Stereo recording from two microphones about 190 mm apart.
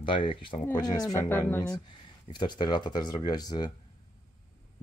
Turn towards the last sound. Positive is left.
turn(degrees=20)  # may be behind; listen again after turning